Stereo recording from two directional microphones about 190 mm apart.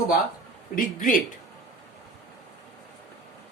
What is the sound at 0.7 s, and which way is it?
Speech, 45° left (ahead or behind).